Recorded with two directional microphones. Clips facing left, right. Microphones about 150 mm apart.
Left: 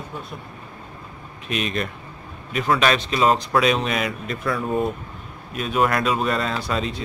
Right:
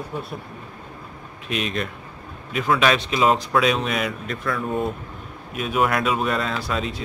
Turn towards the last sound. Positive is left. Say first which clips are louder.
# left 1 dB
turn(degrees=0)  # may be behind; listen again after turning